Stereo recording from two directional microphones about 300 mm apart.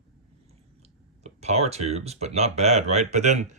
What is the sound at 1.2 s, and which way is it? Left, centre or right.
Speech, right.